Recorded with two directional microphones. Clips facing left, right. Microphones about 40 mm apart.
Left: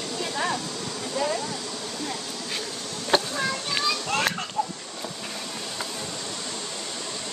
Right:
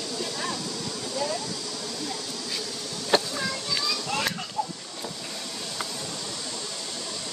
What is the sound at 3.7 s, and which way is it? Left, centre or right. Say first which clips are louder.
Children playing: left 3 dB; left.